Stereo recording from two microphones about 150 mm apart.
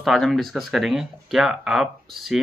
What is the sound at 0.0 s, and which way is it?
Speech, centre (ahead or behind).